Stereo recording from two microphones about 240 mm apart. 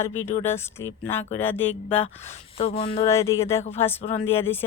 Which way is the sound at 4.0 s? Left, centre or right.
Left.